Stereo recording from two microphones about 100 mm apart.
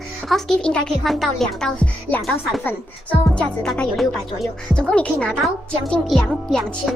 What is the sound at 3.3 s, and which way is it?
Speech, 10° left (ahead or behind).